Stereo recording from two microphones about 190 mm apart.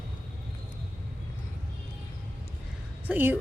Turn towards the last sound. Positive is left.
turn(degrees=-10)  # may be behind; listen again after turning